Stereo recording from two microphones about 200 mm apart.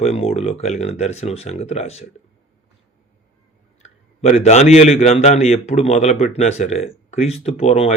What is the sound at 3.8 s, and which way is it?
A man's voice, 35° left (ahead or behind).